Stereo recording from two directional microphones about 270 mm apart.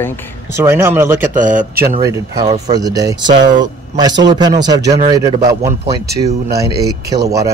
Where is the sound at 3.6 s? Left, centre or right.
Centre.